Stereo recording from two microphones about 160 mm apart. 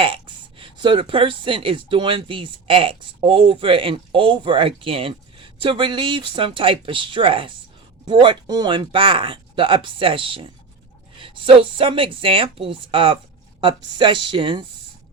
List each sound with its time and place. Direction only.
0.0 s speech: 35° right (ahead or behind)